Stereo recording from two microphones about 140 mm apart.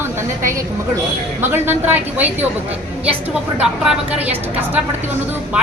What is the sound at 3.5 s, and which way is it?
A woman's voice, 10° right (ahead or behind).